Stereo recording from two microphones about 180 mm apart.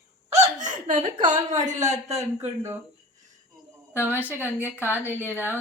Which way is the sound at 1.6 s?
40° right (ahead or behind).